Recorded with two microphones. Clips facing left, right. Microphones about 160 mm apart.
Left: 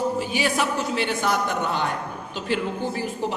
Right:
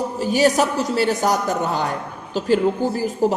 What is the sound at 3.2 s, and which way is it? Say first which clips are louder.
Speech: right 10 dB; 40° right (ahead or behind).